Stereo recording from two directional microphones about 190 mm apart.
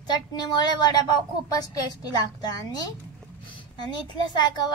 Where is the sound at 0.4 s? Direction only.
20° left (ahead or behind).